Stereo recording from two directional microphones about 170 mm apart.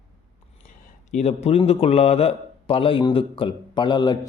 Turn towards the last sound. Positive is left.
turn(degrees=25)  # may be behind; listen again after turning